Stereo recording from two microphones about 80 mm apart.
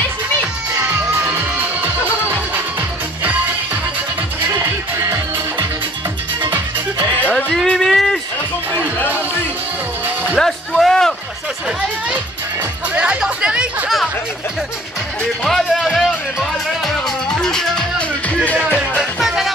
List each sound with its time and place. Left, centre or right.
4.9 s music: right
6.4 s music: right
7.2 s music: centre
7.7 s a sound: centre
10.3 s a sound: centre
12.9 s speech: centre
15.4 s music: centre
19.1 s music: centre